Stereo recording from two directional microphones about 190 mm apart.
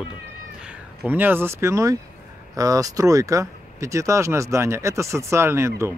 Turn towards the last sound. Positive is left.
turn(degrees=-15)  # may be behind; listen again after turning